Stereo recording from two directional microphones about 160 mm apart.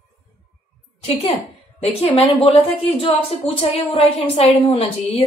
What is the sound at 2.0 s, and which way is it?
A woman's voice, 40° left (ahead or behind).